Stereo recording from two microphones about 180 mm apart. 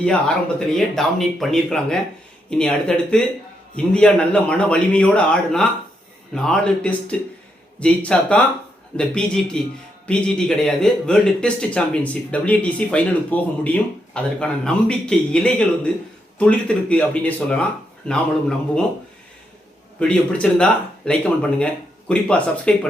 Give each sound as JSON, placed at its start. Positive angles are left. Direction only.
{"t": 0.0, "sound": "a man's voice", "side_deg": 5}
{"t": 20.0, "sound": "a man's voice", "side_deg": 5}